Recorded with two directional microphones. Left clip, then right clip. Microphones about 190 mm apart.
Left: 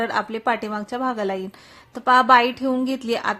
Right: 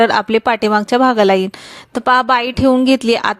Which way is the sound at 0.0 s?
40° right (ahead or behind).